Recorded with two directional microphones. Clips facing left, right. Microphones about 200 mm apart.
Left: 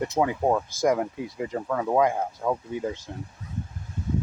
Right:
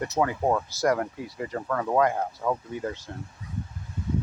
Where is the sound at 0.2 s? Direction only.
10° left (ahead or behind).